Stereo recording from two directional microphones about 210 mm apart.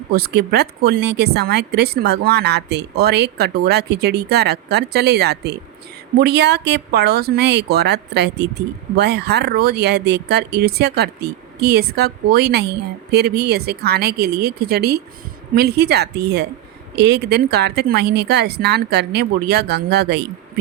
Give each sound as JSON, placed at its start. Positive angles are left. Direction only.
{"t": 0.1, "sound": "speech", "side_deg": -50}